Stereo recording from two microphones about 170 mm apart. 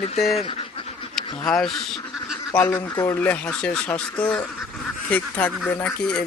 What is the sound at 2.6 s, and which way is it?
Speech, 15° left (ahead or behind).